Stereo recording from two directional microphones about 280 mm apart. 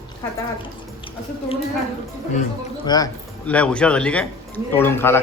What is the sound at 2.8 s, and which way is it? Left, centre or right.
Speech, centre.